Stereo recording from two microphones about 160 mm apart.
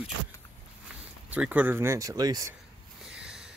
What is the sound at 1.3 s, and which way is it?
Speech, 10° right (ahead or behind).